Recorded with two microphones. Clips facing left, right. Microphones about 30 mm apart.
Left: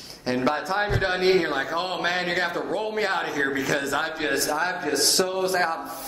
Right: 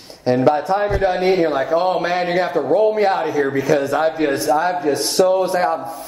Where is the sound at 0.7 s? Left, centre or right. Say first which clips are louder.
Right 6 dB; centre.